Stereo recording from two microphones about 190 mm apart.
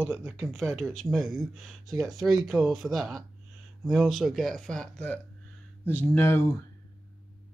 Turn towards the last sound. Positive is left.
turn(degrees=15)  # may be behind; listen again after turning